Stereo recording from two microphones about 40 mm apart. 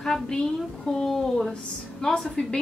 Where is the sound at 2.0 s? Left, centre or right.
Left.